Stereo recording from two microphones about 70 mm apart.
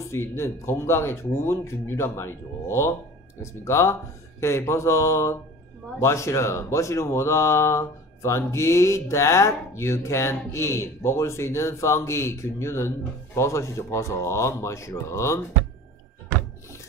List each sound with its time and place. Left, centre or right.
0.1 s speech: left